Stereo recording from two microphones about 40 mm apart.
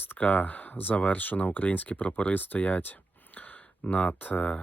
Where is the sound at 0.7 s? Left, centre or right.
Left.